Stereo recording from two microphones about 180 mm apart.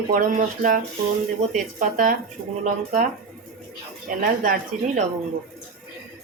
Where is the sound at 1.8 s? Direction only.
45° right (ahead or behind).